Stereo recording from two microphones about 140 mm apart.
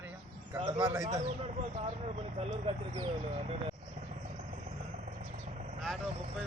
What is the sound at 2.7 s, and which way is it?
Speech, 40° right (ahead or behind).